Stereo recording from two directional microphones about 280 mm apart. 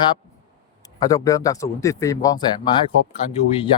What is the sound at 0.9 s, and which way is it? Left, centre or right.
Speech, centre.